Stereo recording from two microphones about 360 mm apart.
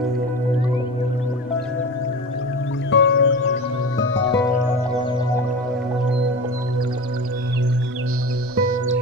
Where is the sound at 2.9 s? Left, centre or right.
Left.